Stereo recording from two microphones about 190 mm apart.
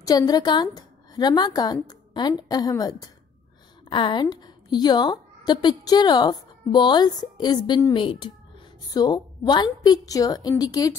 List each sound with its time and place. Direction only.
0.0 s a woman's voice: 20° left (ahead or behind)